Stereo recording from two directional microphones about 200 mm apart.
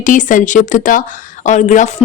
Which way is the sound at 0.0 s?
40° left (ahead or behind).